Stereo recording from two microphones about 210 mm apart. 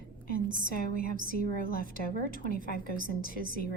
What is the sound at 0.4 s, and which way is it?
Speech, 40° right (ahead or behind).